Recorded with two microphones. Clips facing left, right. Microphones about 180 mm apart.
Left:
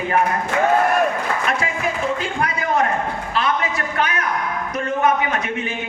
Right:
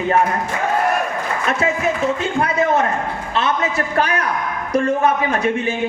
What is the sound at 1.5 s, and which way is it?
A man's voice, 25° right (ahead or behind).